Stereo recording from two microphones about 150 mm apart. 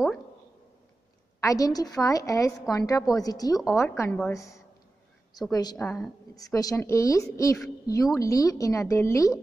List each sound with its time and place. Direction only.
1.4 s a woman's voice: 20° left (ahead or behind)